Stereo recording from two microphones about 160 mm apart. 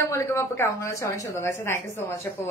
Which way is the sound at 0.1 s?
15° left (ahead or behind).